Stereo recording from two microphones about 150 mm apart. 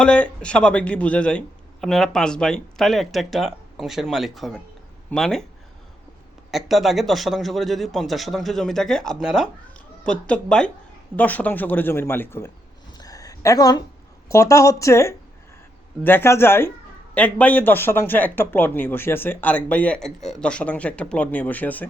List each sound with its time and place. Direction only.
0.0 s speech: 5° left (ahead or behind)
6.5 s speech: centre (ahead or behind); by 12.5 s 15° left (ahead or behind)
13.0 s a sound: 25° left (ahead or behind)
14.3 s speech: 20° left (ahead or behind)